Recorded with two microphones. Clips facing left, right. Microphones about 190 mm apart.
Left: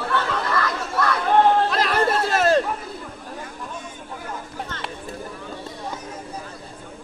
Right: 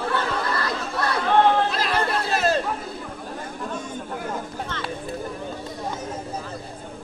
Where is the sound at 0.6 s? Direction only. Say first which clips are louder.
Left 2 dB; 30° right (ahead or behind).